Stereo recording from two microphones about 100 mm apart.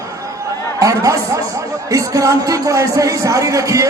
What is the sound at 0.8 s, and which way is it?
Speech, 35° right (ahead or behind).